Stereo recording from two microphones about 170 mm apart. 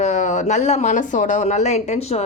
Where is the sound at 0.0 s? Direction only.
45° left (ahead or behind).